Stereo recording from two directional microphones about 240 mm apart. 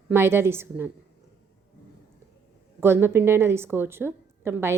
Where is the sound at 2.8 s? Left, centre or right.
Centre.